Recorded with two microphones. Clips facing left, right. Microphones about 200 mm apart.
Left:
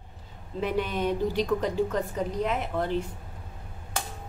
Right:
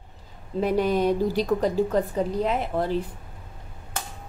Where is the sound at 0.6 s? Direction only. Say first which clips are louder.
Right 6 dB; 40° right (ahead or behind).